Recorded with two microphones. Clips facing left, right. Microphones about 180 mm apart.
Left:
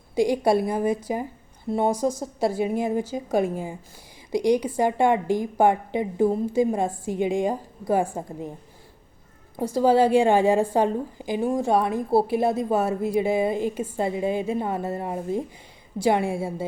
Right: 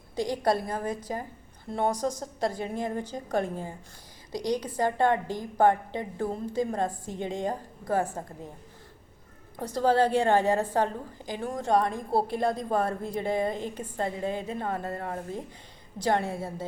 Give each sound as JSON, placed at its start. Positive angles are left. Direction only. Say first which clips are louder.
{"t": 0.2, "sound": "a woman's voice", "louder": "left 6 dB", "side_deg": 10}
{"t": 9.6, "sound": "a woman's voice", "louder": "left 5 dB", "side_deg": 10}